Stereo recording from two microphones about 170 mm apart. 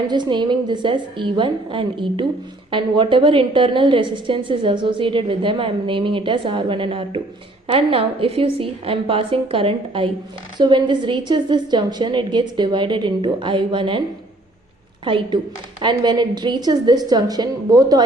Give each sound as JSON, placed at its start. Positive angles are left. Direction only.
{"t": 0.1, "sound": "a woman's voice", "side_deg": -25}
{"t": 15.0, "sound": "a woman's voice", "side_deg": -30}